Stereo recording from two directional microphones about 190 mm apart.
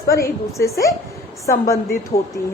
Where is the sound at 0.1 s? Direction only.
15° left (ahead or behind).